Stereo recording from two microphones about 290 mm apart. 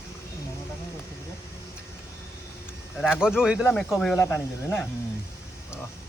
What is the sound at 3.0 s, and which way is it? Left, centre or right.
Speech, centre.